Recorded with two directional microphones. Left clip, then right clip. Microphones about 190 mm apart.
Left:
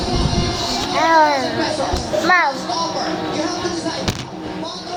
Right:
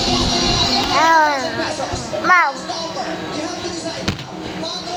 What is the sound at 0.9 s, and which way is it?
Music, 5° left (ahead or behind).